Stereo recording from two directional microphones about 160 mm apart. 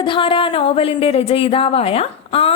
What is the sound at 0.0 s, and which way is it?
A woman's voice, 30° left (ahead or behind).